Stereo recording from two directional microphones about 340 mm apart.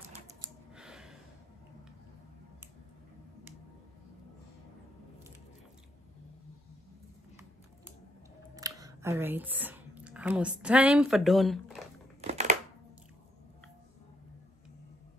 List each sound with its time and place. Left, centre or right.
0.7 s gasp: centre
8.5 s speech: centre
12.2 s a sound: centre